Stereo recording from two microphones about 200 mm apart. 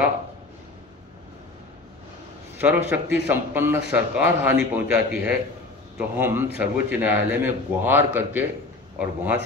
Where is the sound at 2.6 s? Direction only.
10° right (ahead or behind).